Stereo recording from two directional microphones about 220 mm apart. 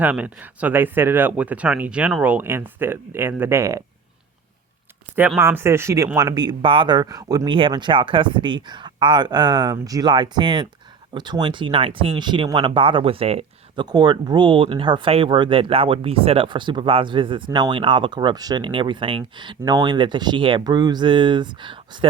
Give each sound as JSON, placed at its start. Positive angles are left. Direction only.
{"t": 0.0, "sound": "speech", "side_deg": -5}
{"t": 5.1, "sound": "speech", "side_deg": -10}